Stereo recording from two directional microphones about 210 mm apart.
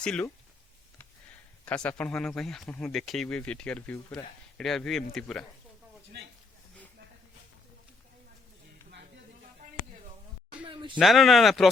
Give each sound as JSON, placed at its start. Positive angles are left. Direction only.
{"t": 0.0, "sound": "speech", "side_deg": 5}
{"t": 1.6, "sound": "speech", "side_deg": 5}
{"t": 10.7, "sound": "a sound", "side_deg": -25}
{"t": 10.9, "sound": "speech", "side_deg": 0}